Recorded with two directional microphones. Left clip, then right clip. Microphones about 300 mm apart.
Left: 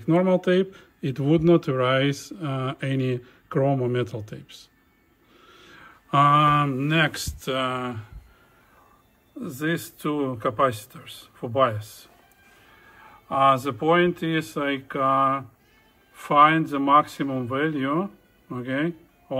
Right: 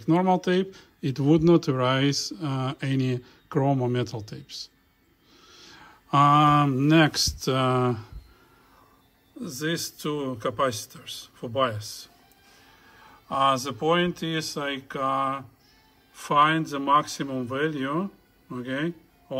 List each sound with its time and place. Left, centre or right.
0.0 s speech: centre
9.4 s speech: centre